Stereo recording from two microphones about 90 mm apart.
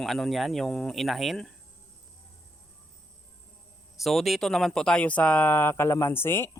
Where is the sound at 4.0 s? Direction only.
Centre (ahead or behind); by 6.5 s 25° left (ahead or behind).